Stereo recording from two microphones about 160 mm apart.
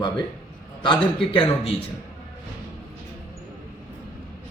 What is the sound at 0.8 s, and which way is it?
Speech, 35° left (ahead or behind).